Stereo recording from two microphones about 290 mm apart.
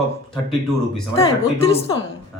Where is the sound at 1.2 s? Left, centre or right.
Centre.